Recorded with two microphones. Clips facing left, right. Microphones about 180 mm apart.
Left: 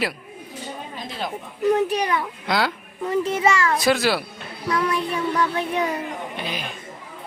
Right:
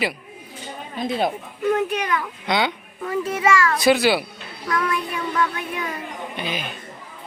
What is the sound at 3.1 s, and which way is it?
Child singing, 25° left (ahead or behind).